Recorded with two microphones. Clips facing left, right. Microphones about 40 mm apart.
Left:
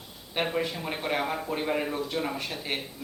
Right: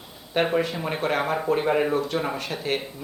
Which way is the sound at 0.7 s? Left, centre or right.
Centre.